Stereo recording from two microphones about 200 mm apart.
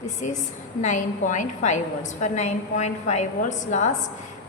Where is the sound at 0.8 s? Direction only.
40° left (ahead or behind).